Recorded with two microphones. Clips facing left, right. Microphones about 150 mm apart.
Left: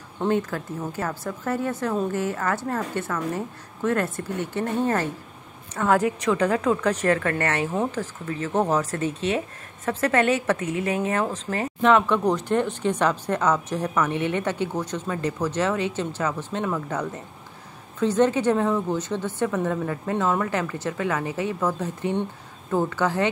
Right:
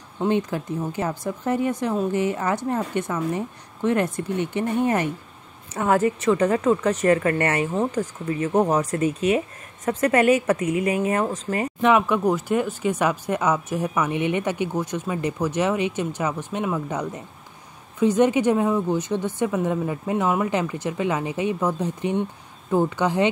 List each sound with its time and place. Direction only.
0.3 s a woman's voice: 20° right (ahead or behind)
5.9 s a woman's voice: 5° right (ahead or behind)